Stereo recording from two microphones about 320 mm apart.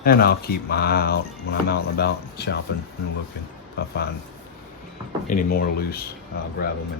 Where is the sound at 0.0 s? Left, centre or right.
Left.